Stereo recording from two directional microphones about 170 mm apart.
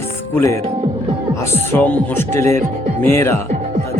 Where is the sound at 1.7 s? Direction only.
10° left (ahead or behind).